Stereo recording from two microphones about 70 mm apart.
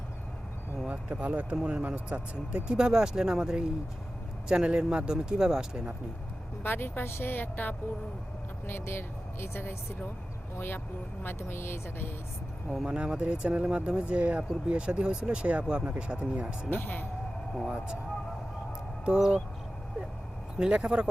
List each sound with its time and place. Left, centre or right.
0.9 s speech: centre
6.6 s a woman's voice: left
11.3 s speech: left
12.8 s speech: centre
16.6 s a woman's voice: left
17.7 s speech: centre
19.0 s speech: centre
20.6 s speech: centre